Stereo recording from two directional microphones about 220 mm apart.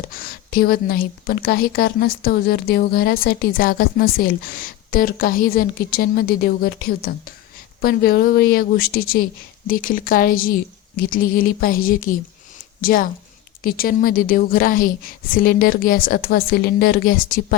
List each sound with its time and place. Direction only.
0.1 s a woman's voice: 40° left (ahead or behind)